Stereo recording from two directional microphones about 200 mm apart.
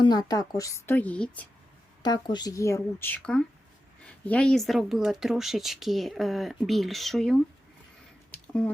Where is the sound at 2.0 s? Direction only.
20° left (ahead or behind).